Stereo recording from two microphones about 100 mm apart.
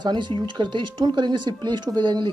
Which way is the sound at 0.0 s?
50° right (ahead or behind).